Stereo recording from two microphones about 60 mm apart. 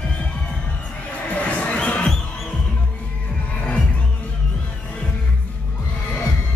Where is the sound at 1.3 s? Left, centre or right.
Left.